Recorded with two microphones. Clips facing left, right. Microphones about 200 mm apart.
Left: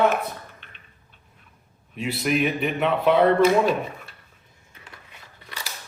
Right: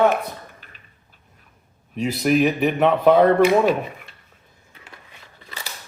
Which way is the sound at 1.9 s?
40° right (ahead or behind).